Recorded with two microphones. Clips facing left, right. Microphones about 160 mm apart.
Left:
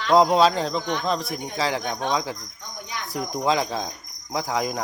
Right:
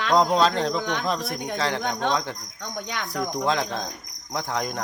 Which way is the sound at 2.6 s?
80° right.